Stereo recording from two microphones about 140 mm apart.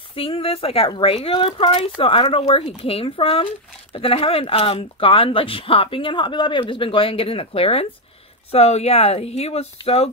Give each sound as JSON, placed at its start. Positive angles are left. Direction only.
{"t": 0.1, "sound": "speech", "side_deg": 40}